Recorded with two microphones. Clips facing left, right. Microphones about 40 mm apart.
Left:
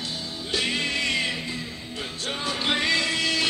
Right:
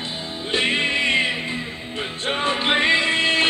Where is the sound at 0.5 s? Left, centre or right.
Right.